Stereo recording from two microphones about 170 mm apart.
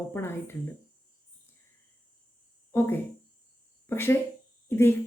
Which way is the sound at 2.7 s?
15° left (ahead or behind).